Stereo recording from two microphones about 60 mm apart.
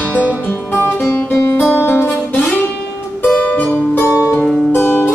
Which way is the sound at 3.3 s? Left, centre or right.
Left.